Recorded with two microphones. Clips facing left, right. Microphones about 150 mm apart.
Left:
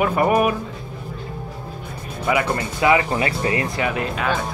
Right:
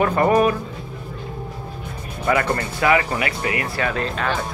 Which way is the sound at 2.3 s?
10° left (ahead or behind).